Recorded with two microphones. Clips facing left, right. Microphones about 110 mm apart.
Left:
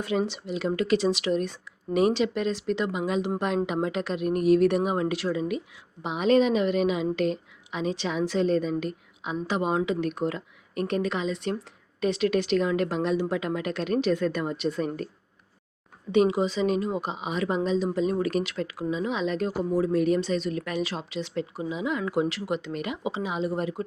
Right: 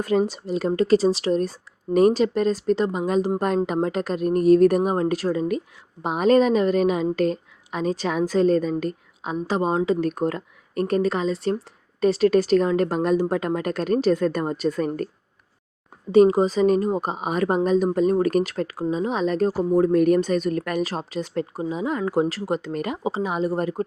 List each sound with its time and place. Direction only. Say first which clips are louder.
0.0 s speech: right 6 dB; 40° right (ahead or behind)
16.1 s speech: right 7 dB; 40° right (ahead or behind)